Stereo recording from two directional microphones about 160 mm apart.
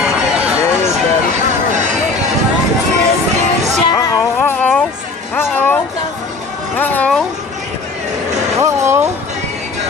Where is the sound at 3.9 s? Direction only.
15° left (ahead or behind).